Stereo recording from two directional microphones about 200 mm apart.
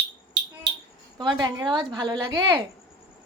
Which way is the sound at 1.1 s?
20° right (ahead or behind).